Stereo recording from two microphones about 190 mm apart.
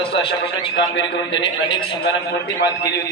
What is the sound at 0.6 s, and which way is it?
Speech, 25° left (ahead or behind).